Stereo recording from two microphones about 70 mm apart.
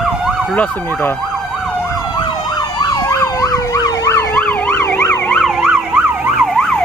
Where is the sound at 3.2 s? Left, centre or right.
Left.